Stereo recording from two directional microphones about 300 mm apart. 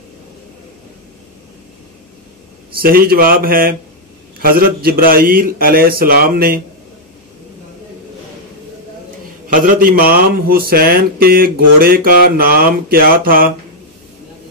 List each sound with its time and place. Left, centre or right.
2.7 s speech: right
9.5 s speech: right